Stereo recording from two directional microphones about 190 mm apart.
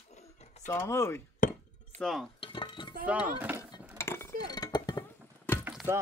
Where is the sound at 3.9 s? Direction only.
15° left (ahead or behind).